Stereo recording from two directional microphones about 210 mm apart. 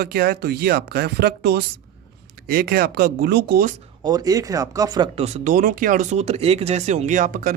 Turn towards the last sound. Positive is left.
turn(degrees=-40)  # may be behind; listen again after turning